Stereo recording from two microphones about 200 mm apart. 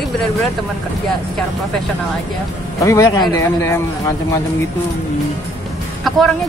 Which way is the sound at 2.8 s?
15° left (ahead or behind).